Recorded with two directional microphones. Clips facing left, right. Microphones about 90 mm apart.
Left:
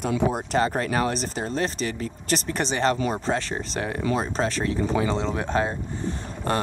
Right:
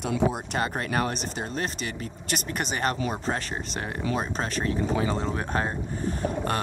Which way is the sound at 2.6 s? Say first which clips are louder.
Left 5 dB; 5° right (ahead or behind).